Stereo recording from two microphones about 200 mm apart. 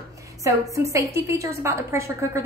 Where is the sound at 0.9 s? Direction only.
15° right (ahead or behind).